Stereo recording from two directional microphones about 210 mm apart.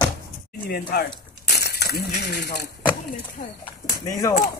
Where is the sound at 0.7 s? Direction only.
45° left (ahead or behind).